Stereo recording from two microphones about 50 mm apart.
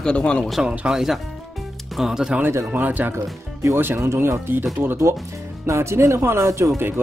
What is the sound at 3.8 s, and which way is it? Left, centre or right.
Speech, right.